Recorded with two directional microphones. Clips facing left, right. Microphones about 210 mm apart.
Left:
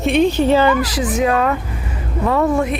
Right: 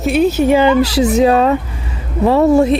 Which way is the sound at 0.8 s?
30° right (ahead or behind).